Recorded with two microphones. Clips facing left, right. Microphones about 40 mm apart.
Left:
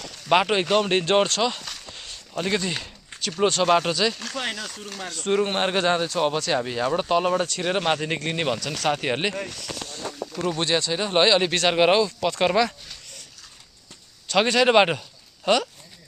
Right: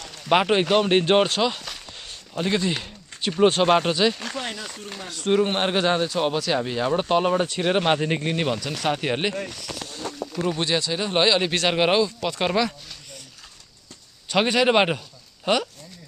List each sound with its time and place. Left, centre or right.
0.2 s speech: centre
3.4 s speech: right
3.9 s speech: centre
7.4 s speech: centre
8.3 s speech: centre
8.5 s speech: centre
14.3 s speech: centre
14.7 s speech: centre